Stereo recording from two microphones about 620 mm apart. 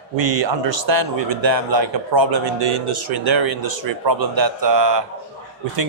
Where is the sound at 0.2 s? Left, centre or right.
Right.